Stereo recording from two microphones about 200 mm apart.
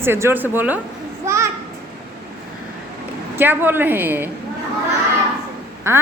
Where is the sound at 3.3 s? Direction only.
10° right (ahead or behind).